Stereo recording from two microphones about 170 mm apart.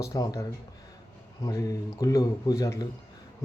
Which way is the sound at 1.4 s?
20° left (ahead or behind).